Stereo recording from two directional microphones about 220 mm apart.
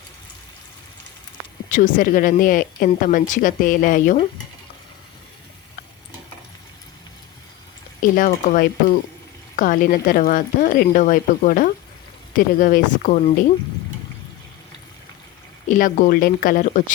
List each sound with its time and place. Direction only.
1.7 s a woman's voice: 35° left (ahead or behind)
8.1 s a woman's voice: 40° left (ahead or behind)
15.7 s a woman's voice: 35° left (ahead or behind)